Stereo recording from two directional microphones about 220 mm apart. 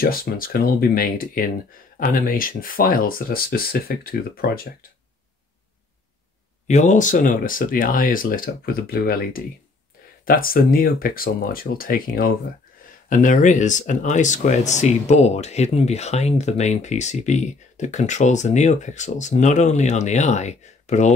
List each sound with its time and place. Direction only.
0.0 s speech: 40° left (ahead or behind)
6.7 s speech: 35° left (ahead or behind)